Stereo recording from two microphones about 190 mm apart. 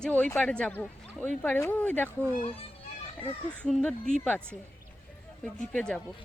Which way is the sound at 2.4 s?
30° left (ahead or behind).